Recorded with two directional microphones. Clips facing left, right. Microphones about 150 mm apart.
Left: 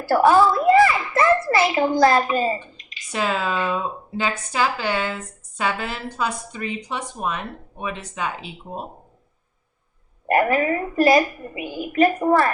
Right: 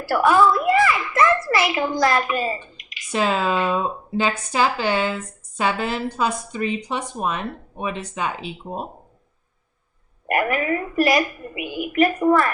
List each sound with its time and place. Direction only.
0.1 s a child's voice: 30° left (ahead or behind)
3.1 s speech: 25° right (ahead or behind)
10.2 s a woman's voice: 30° left (ahead or behind)